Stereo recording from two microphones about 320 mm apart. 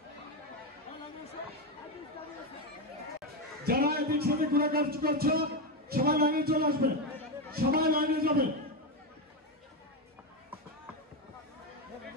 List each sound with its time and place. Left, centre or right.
3.6 s a man's voice: right